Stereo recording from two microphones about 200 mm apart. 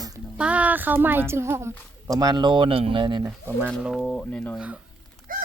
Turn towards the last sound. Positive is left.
turn(degrees=-45)  # may be behind; listen again after turning